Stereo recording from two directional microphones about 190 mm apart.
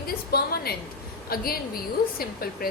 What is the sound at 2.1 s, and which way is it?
Speech, 50° left (ahead or behind).